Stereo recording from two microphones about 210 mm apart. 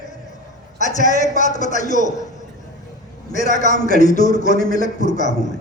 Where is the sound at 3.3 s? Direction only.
35° left (ahead or behind).